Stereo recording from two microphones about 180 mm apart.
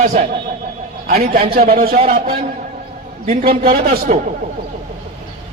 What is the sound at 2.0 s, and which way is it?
Speech, 35° right (ahead or behind).